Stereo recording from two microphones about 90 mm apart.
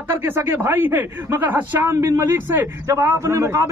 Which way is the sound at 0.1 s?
25° right (ahead or behind).